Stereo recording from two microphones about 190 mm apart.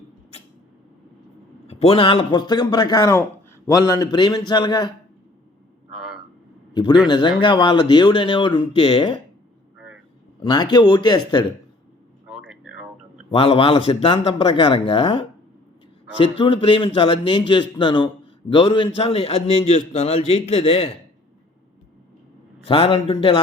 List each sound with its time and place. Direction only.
1.6 s a man's voice: 30° left (ahead or behind)
5.9 s frog: centre (ahead or behind)
7.1 s a man's voice: 25° left (ahead or behind)
10.4 s a man's voice: 25° left (ahead or behind)
12.5 s a sound: 5° right (ahead or behind)
13.3 s a man's voice: 30° left (ahead or behind)
16.4 s a man's voice: 25° left (ahead or behind)
22.6 s a man's voice: 30° left (ahead or behind)